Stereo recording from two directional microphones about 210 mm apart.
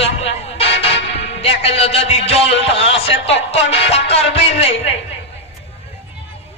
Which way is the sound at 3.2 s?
30° left (ahead or behind).